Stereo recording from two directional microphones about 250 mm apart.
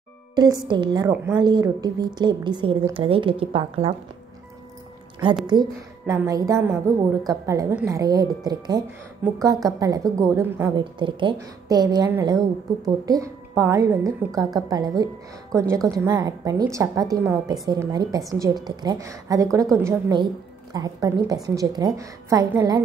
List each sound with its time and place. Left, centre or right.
0.7 s a woman's voice: centre
5.5 s a woman's voice: centre